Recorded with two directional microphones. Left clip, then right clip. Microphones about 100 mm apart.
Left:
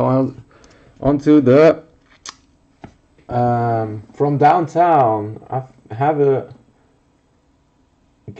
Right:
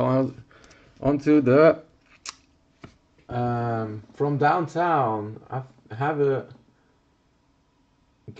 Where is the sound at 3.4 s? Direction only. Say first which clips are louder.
Left 9 dB; 10° left (ahead or behind).